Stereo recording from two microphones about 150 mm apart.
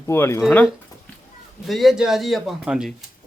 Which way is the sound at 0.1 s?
15° left (ahead or behind).